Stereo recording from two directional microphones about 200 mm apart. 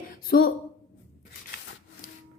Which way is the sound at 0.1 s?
50° left (ahead or behind).